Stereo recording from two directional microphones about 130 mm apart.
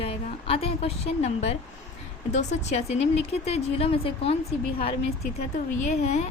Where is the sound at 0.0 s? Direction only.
45° left (ahead or behind).